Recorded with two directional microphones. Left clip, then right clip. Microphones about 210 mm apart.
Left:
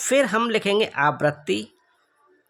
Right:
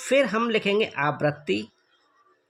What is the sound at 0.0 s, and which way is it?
Speech, 35° left (ahead or behind).